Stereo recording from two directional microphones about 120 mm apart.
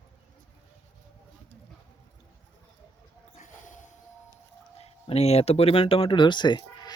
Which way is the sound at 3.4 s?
90° left.